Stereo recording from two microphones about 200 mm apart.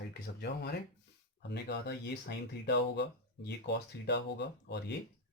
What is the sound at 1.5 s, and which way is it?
Speech, 60° left (ahead or behind).